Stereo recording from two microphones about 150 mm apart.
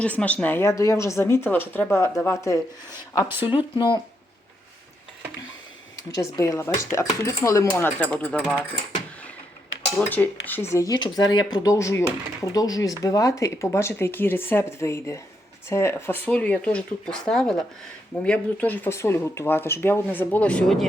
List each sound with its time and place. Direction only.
0.0 s speech: 10° left (ahead or behind)
3.4 s speech: 35° left (ahead or behind)
6.0 s speech: 20° left (ahead or behind); by 8.6 s 5° left (ahead or behind)
10.0 s speech: 10° left (ahead or behind)